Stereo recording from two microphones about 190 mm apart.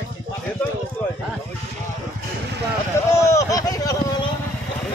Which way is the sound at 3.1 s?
15° left (ahead or behind).